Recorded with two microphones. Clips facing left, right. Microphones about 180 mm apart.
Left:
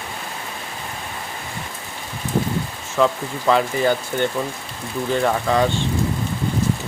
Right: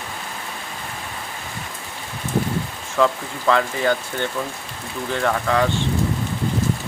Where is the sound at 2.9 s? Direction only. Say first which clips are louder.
Left 1 dB; 10° left (ahead or behind).